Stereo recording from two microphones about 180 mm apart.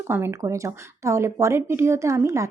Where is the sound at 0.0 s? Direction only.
15° right (ahead or behind).